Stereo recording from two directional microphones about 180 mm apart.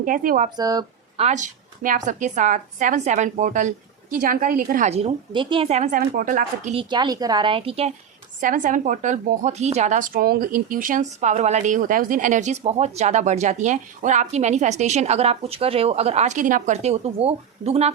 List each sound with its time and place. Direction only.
0.0 s a woman's voice: 50° right (ahead or behind)
0.5 s speech: 20° right (ahead or behind)
1.2 s a woman's voice: 40° right (ahead or behind)
4.9 s speech: 35° right (ahead or behind)
6.0 s a woman's voice: 50° right (ahead or behind)
6.7 s speech: 25° right (ahead or behind)
8.4 s speech: 45° right (ahead or behind)